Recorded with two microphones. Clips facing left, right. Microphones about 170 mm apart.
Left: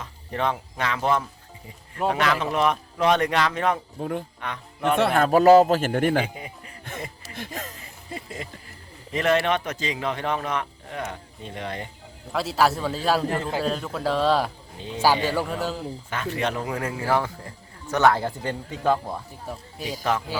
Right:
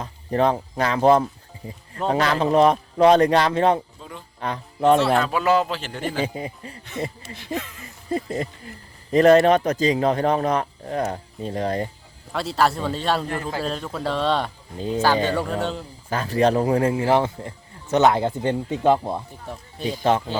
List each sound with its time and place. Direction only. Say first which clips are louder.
0.0 s a man's voice: right 6 dB; 35° right (ahead or behind)
3.9 s speech: left 11 dB; 55° left (ahead or behind)
4.4 s speech: right 6 dB; 35° right (ahead or behind)
4.9 s a man's voice: left 1 dB; 55° left (ahead or behind)
6.2 s a man's voice: right 7 dB; 35° right (ahead or behind)
7.3 s a man's voice: right 4 dB; 50° left (ahead or behind)
8.1 s a man's voice: right 10 dB; 40° right (ahead or behind)
12.3 s a man's voice: right 1 dB; centre (ahead or behind)
14.8 s a man's voice: right 9 dB; 40° right (ahead or behind)
15.0 s a man's voice: even; 10° left (ahead or behind)
16.0 s a man's voice: right 9 dB; 35° right (ahead or behind)